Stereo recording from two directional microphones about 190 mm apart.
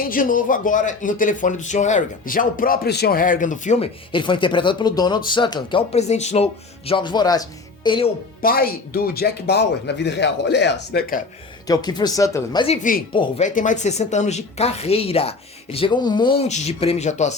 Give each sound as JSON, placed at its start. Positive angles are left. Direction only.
{"t": 0.0, "sound": "speech", "side_deg": 45}
{"t": 4.1, "sound": "speech", "side_deg": 25}
{"t": 5.9, "sound": "speech", "side_deg": 35}
{"t": 8.4, "sound": "speech", "side_deg": 50}
{"t": 11.7, "sound": "speech", "side_deg": 20}
{"t": 12.6, "sound": "speech", "side_deg": 40}
{"t": 13.1, "sound": "speech", "side_deg": 25}
{"t": 13.4, "sound": "speech", "side_deg": 40}